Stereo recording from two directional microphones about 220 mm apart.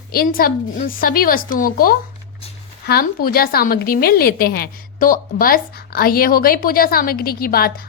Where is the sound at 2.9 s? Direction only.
45° left (ahead or behind).